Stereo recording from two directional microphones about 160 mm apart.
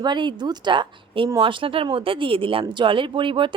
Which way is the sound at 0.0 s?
30° right (ahead or behind).